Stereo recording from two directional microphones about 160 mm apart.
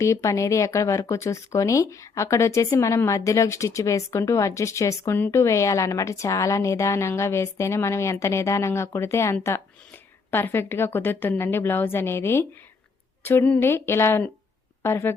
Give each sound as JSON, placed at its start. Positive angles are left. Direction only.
{"t": 0.0, "sound": "a woman's voice", "side_deg": 20}